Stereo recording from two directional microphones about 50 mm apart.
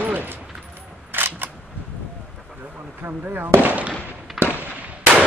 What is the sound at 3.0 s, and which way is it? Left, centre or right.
Speech, right.